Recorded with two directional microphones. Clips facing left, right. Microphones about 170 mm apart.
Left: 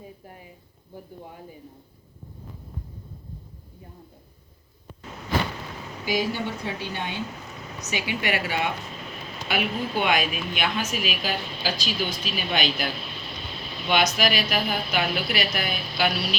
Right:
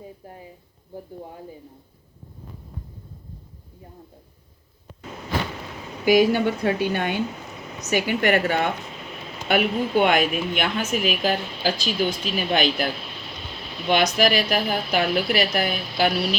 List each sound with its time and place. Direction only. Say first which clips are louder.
0.3 s a sound: right 4 dB; 30° right (ahead or behind)
6.1 s speech: right 9 dB; 60° right (ahead or behind)
7.9 s a woman's voice: right 7 dB; 50° right (ahead or behind)
14.0 s a woman's voice: right 4 dB; 45° right (ahead or behind)